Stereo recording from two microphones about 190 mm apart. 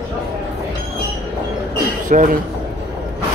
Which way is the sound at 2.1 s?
45° right (ahead or behind).